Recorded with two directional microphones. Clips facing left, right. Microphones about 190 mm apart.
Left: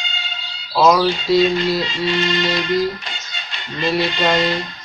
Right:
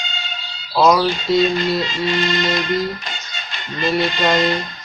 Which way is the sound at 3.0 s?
45° right (ahead or behind).